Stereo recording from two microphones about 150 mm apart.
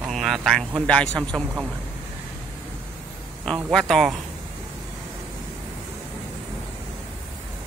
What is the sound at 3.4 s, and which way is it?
Speech, 5° left (ahead or behind).